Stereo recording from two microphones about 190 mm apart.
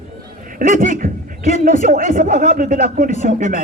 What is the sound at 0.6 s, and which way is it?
A man's voice, 45° right (ahead or behind).